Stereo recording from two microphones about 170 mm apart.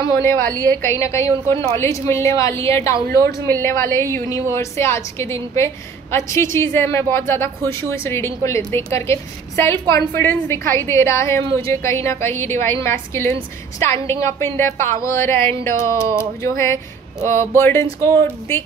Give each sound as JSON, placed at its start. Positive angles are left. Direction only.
{"t": 0.7, "sound": "a woman's voice", "side_deg": 15}